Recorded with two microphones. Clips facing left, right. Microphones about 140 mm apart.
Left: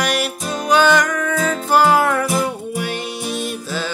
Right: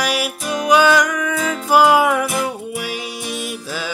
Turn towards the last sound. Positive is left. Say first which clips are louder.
# left 2 dB
turn(degrees=-10)  # may be behind; listen again after turning